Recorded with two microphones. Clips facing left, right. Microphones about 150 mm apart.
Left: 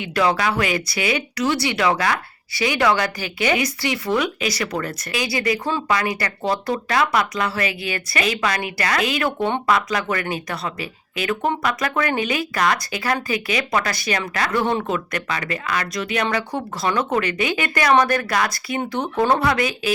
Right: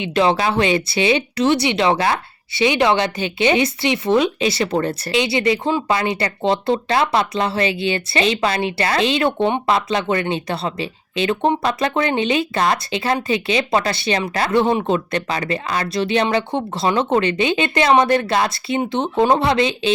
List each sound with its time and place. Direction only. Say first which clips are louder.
0.0 s speech: right 3 dB; 25° right (ahead or behind)